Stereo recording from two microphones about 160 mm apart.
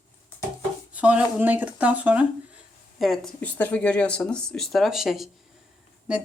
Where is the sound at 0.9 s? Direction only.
10° right (ahead or behind).